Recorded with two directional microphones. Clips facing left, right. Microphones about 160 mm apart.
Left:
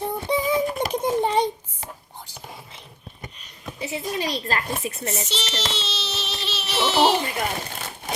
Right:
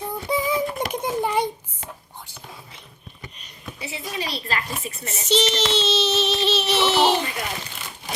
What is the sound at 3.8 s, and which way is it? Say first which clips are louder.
Speech: left 4 dB; 45° left (ahead or behind).